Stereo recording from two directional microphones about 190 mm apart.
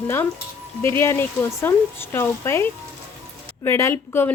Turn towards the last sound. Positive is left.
turn(degrees=15)  # may be behind; listen again after turning